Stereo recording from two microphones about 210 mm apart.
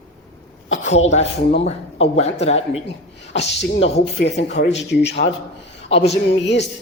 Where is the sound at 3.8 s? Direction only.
25° left (ahead or behind).